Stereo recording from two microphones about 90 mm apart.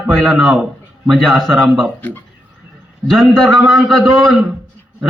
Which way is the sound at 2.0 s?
20° left (ahead or behind).